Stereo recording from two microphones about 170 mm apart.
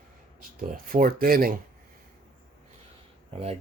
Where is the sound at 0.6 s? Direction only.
60° right (ahead or behind).